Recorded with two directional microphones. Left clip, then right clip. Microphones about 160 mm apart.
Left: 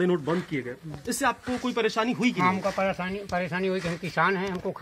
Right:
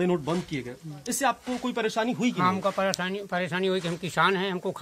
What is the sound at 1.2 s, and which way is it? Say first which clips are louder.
Speech: even; 60° right (ahead or behind).